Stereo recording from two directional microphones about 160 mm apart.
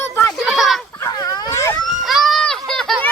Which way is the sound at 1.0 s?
20° left (ahead or behind).